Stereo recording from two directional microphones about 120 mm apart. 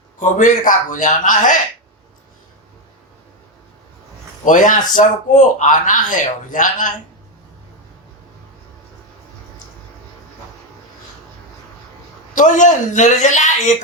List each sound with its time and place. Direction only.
0.2 s speech: 90° left
4.4 s speech: 90° left
12.3 s speech: 90° left